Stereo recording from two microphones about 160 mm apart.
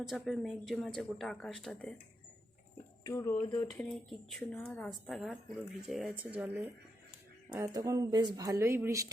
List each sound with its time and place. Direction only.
0.0 s speech: centre (ahead or behind)
3.1 s speech: 20° left (ahead or behind)
3.7 s speech: centre (ahead or behind); by 9.0 s 15° right (ahead or behind)